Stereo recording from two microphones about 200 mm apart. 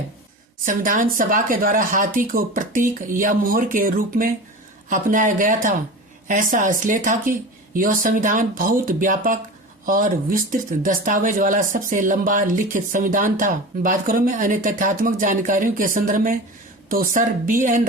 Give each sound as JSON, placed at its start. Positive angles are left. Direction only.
{"t": 0.6, "sound": "speech", "side_deg": -45}